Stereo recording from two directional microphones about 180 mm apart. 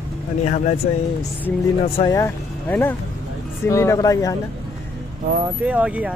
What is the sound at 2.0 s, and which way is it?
Speech, 15° left (ahead or behind).